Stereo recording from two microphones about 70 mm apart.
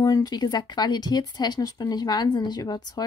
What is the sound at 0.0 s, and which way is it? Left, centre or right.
Speech, left.